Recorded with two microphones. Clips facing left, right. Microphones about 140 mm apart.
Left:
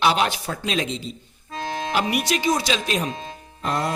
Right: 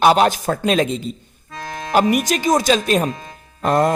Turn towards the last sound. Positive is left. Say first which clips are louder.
# right 8 dB
turn(degrees=-50)  # may be behind; listen again after turning